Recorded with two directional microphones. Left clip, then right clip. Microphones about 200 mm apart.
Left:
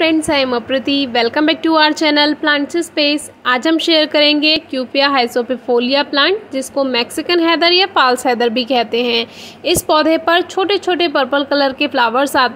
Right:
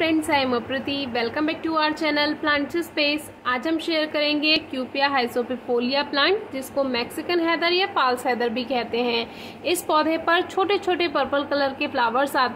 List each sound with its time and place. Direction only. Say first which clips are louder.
0.0 s a woman's voice: left 7 dB; 35° left (ahead or behind)